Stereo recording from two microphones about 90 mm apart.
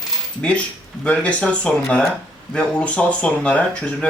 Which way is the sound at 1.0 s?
15° left (ahead or behind).